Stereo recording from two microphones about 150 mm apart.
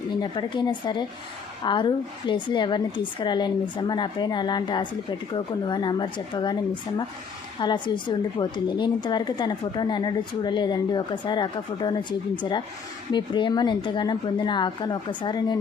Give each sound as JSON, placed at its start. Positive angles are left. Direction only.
{"t": 0.2, "sound": "a woman's voice", "side_deg": 30}